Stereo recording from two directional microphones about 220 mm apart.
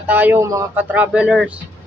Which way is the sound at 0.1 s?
10° right (ahead or behind).